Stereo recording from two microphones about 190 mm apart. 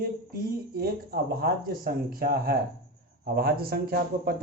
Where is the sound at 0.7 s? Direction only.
50° right (ahead or behind).